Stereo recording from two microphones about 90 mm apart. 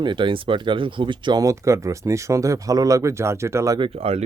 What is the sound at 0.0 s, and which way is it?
Speech, 60° right (ahead or behind).